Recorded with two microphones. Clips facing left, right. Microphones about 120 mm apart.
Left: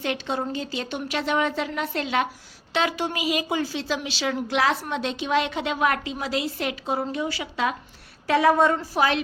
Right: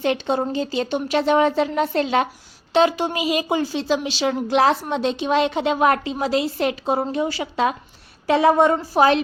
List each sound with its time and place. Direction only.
0.0 s a woman's voice: 30° right (ahead or behind)